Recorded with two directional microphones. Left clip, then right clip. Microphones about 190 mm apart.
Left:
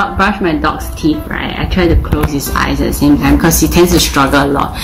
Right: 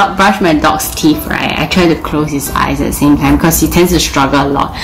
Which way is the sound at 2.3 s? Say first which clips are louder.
Right 1 dB; 30° right (ahead or behind).